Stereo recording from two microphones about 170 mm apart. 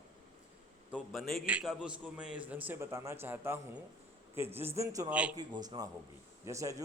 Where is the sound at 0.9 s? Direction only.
Centre (ahead or behind); by 5.1 s 20° right (ahead or behind).